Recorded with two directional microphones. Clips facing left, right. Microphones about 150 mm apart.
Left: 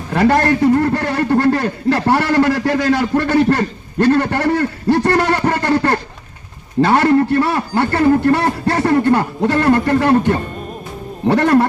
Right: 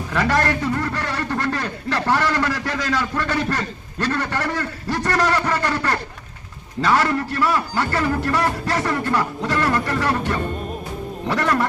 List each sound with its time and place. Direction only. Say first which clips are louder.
0.1 s a man's voice: left 7 dB; 40° left (ahead or behind)